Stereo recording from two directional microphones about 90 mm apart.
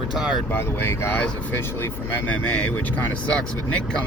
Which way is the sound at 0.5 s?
25° left (ahead or behind).